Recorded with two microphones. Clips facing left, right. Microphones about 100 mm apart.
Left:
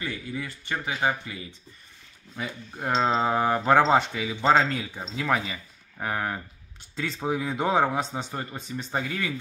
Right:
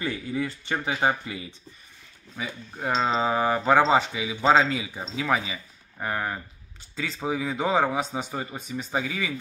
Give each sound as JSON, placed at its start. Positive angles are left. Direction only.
{"t": 0.0, "sound": "speech", "side_deg": -25}
{"t": 2.3, "sound": "speech", "side_deg": 0}